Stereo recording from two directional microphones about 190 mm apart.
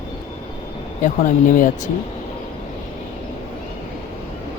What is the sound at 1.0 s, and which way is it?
Speech, 45° left (ahead or behind).